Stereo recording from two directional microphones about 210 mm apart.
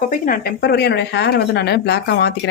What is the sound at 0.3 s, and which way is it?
Speech, 50° left (ahead or behind).